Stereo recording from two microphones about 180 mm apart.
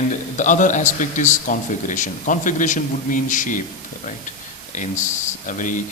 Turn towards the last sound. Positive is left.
turn(degrees=45)  # may be behind; listen again after turning